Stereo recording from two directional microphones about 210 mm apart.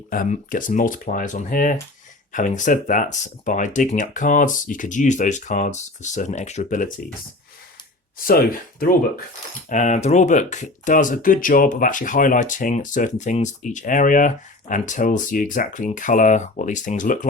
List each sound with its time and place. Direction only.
0.1 s speech: 40° left (ahead or behind)
8.2 s speech: 45° left (ahead or behind)